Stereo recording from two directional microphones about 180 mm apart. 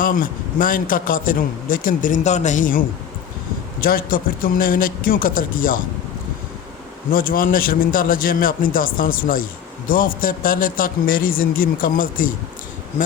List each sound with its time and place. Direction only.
0.0 s a man's voice: 50° left (ahead or behind)
7.1 s a man's voice: 55° left (ahead or behind)